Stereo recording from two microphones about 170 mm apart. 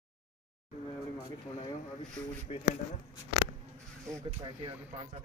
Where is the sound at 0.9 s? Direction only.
25° left (ahead or behind).